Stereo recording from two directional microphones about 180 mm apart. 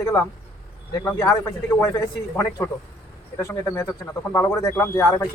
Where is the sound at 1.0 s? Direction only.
15° left (ahead or behind).